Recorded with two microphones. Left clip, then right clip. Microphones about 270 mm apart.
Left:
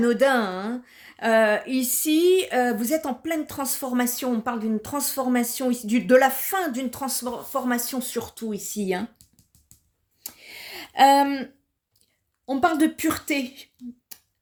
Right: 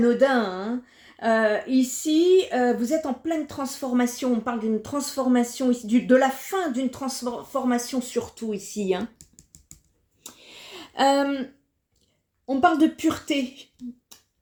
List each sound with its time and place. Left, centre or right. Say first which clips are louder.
0.0 s speech: even; left
10.2 s a sound: left 3 dB; left
12.5 s speech: right 2 dB; left